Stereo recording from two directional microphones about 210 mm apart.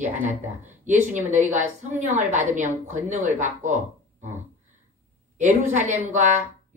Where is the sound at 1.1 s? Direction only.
35° right (ahead or behind).